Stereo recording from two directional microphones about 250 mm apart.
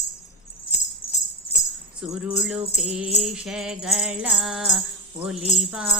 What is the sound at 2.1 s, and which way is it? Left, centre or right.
Jingle bell, centre.